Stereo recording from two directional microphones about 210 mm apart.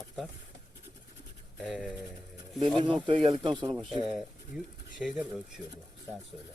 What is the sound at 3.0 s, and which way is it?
Speech, 25° right (ahead or behind).